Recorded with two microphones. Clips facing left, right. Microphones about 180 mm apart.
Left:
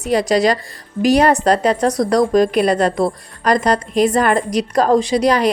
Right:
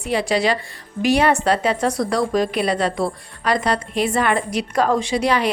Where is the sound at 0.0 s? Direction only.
40° left (ahead or behind).